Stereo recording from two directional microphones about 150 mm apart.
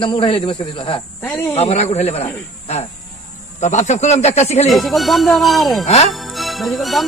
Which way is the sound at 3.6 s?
50° left (ahead or behind).